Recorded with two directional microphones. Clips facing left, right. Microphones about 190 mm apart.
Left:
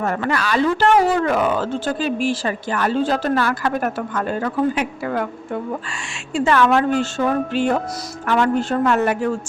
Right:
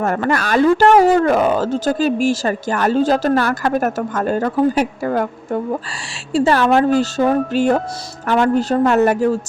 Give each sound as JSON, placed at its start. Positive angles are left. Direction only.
{"t": 0.0, "sound": "a woman's voice", "side_deg": -45}